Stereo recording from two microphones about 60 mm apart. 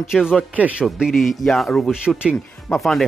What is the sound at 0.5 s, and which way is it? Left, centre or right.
Speech, right.